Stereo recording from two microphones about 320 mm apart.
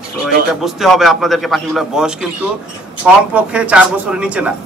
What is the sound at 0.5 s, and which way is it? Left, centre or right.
A man's voice, centre.